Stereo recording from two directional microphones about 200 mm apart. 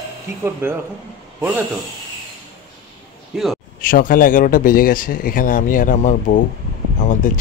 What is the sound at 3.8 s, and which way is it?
Speech, 45° left (ahead or behind).